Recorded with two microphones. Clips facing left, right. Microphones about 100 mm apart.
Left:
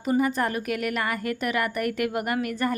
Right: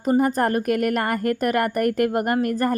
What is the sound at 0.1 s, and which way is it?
A woman's voice, 40° right (ahead or behind).